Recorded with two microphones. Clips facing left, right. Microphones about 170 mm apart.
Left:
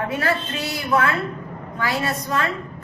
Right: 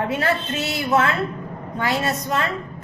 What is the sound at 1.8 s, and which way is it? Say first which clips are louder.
Speech: right 1 dB; 25° right (ahead or behind).